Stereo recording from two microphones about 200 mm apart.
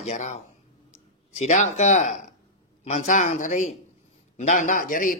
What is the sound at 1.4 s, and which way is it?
A woman's voice, 35° left (ahead or behind).